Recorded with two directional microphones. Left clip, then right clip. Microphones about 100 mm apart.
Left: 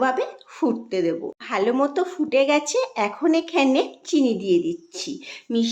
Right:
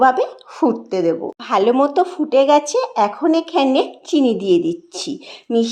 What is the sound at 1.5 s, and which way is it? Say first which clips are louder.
Speech: right 7 dB; 50° right (ahead or behind).